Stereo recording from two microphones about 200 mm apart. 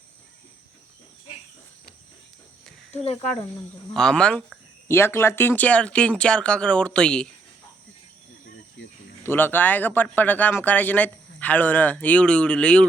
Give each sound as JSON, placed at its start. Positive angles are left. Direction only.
{"t": 3.0, "sound": "speech", "side_deg": 30}
{"t": 3.9, "sound": "speech", "side_deg": 5}
{"t": 9.2, "sound": "speech", "side_deg": 10}